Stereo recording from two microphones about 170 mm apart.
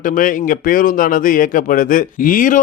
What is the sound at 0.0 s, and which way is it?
Speech, 55° left (ahead or behind).